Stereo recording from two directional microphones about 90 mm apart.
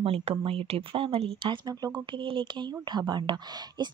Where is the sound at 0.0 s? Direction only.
90° right.